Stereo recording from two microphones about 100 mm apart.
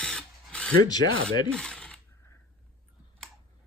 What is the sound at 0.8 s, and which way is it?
Speech, 40° left (ahead or behind).